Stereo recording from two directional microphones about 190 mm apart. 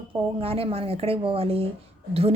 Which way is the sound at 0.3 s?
30° right (ahead or behind).